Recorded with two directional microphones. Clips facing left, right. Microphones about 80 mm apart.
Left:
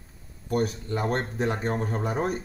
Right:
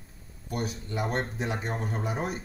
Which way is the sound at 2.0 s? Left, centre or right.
Left.